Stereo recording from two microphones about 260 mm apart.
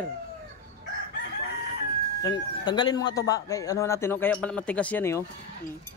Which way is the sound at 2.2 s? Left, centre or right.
Centre.